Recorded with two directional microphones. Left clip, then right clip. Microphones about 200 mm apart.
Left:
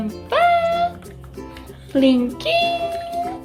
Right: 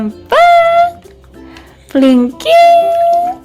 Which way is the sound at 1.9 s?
35° right (ahead or behind).